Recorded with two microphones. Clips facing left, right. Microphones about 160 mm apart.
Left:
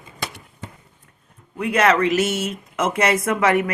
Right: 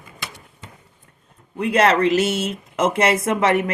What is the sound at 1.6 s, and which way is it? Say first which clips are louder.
Speech: right 1 dB; 30° right (ahead or behind).